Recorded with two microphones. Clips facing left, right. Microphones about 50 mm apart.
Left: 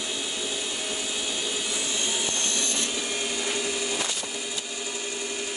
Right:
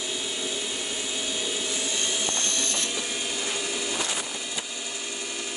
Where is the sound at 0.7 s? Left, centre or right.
Centre.